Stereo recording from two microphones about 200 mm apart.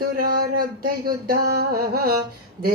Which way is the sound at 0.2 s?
45° right (ahead or behind).